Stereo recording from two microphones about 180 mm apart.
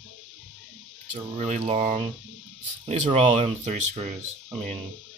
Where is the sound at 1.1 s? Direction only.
40° right (ahead or behind).